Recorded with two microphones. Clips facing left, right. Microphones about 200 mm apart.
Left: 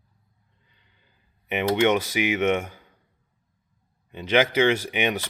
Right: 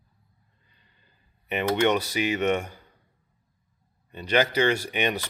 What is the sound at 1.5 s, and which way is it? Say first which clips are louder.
Speech: left 2 dB; 15° left (ahead or behind).